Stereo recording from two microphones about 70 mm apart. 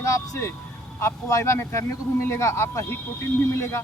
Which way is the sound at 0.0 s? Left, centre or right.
Left.